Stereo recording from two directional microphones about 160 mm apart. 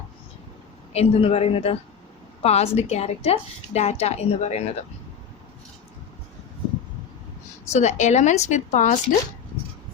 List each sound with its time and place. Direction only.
0.9 s a woman's voice: 40° left (ahead or behind)
7.6 s a woman's voice: 45° left (ahead or behind)